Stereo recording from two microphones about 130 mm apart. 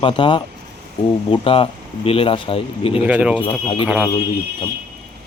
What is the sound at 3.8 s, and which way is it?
Speech, 5° right (ahead or behind).